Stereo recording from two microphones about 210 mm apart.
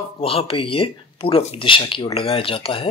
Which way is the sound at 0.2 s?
25° left (ahead or behind).